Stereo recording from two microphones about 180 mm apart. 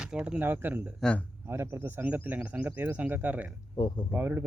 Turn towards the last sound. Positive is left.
turn(degrees=-10)  # may be behind; listen again after turning